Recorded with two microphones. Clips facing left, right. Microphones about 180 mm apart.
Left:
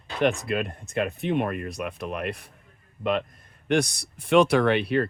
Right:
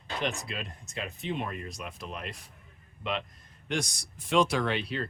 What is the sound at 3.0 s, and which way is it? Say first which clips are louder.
Speech: left 8 dB; 50° left (ahead or behind).